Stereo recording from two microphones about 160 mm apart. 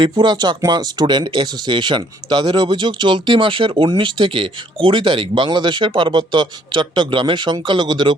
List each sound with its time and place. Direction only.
0.0 s speech: 30° right (ahead or behind)